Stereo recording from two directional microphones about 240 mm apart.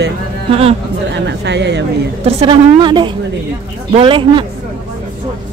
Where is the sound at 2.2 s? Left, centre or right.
Right.